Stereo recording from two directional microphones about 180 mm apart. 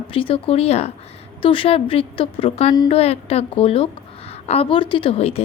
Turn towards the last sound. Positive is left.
turn(degrees=35)  # may be behind; listen again after turning